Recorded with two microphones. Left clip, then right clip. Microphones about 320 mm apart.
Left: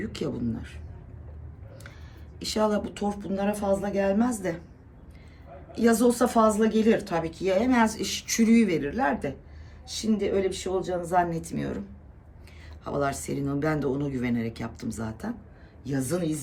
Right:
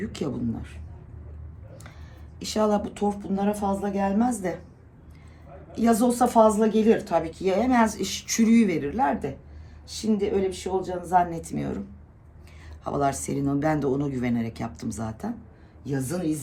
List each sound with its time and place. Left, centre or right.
0.0 s speech: centre
2.4 s speech: centre
5.7 s a woman's voice: centre
12.8 s a woman's voice: centre